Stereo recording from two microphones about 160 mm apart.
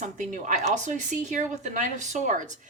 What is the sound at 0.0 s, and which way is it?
Speech, 55° right (ahead or behind).